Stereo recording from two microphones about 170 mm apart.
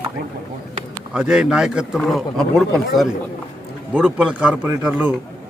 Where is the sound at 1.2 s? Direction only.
5° right (ahead or behind).